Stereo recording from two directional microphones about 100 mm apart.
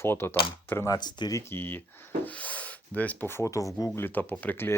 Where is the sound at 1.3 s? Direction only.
25° left (ahead or behind).